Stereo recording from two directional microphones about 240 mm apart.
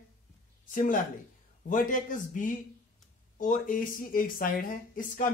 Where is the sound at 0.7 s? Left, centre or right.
Left.